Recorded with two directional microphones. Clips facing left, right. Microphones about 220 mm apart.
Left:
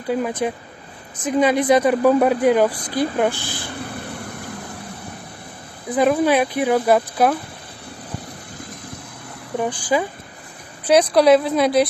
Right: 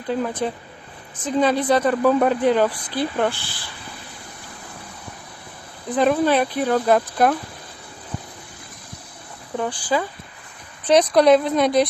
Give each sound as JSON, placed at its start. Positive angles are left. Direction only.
{"t": 0.1, "sound": "speech", "side_deg": 10}
{"t": 3.6, "sound": "spray", "side_deg": 55}
{"t": 5.9, "sound": "speech", "side_deg": 10}
{"t": 9.6, "sound": "speech", "side_deg": 15}
{"t": 10.8, "sound": "a woman's voice", "side_deg": 5}